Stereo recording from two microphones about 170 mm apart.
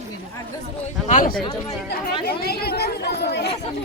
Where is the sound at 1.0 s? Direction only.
45° left (ahead or behind).